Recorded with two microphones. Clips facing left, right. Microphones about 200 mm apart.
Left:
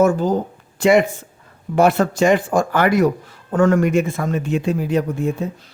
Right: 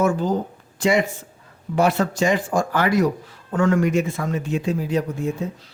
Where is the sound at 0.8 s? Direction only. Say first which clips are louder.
Left 5 dB; 60° left (ahead or behind).